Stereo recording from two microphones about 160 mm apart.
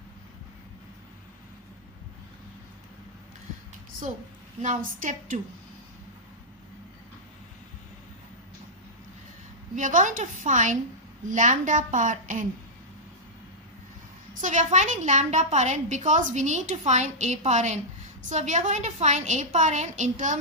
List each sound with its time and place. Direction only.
4.6 s a woman's voice: 50° right (ahead or behind)
9.7 s a woman's voice: 55° right (ahead or behind)
14.4 s a woman's voice: 50° right (ahead or behind)